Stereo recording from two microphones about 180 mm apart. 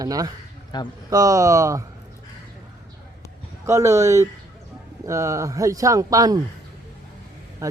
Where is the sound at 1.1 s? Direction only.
20° right (ahead or behind).